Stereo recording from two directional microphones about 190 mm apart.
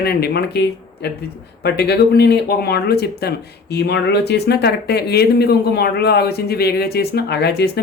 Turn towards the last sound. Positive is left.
turn(degrees=60)  # may be behind; listen again after turning